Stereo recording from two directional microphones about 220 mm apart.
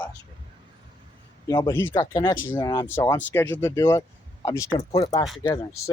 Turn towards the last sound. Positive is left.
turn(degrees=15)  # may be behind; listen again after turning